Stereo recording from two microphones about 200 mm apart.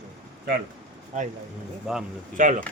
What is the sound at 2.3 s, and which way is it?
Speech, 40° right (ahead or behind).